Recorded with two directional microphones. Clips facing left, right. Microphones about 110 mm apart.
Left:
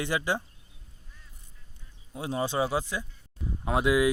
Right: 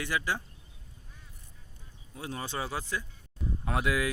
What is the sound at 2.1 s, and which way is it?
Speech, 20° left (ahead or behind).